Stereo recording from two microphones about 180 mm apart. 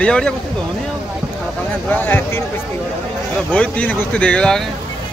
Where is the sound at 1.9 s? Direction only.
10° left (ahead or behind).